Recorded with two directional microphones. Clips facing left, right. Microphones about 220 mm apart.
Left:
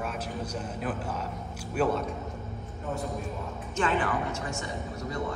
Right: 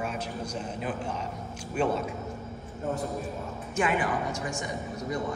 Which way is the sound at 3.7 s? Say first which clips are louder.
Even; 10° right (ahead or behind).